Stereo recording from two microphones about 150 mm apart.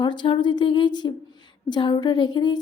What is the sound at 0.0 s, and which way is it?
A woman's voice, 30° left (ahead or behind).